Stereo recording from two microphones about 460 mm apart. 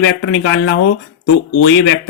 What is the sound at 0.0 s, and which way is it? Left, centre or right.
Speech, left.